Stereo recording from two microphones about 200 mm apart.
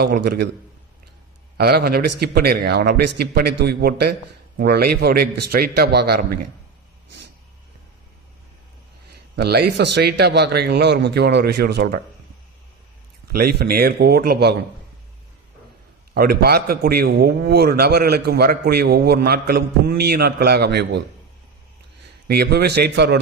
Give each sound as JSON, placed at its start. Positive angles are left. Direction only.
{"t": 0.0, "sound": "a man's voice", "side_deg": -55}
{"t": 1.5, "sound": "a man's voice", "side_deg": -50}
{"t": 9.3, "sound": "a man's voice", "side_deg": -55}
{"t": 13.3, "sound": "a man's voice", "side_deg": -50}
{"t": 16.1, "sound": "a man's voice", "side_deg": -50}
{"t": 22.3, "sound": "a man's voice", "side_deg": -55}